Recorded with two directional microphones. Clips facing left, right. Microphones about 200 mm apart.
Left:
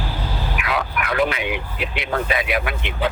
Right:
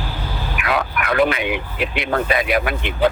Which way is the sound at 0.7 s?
55° right (ahead or behind).